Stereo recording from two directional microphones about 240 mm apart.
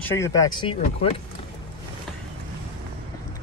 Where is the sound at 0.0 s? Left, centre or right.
Centre.